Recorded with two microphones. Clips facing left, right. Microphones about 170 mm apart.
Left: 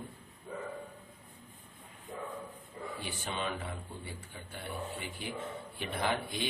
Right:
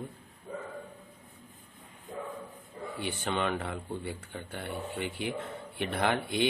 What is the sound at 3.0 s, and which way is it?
Speech, 65° right (ahead or behind).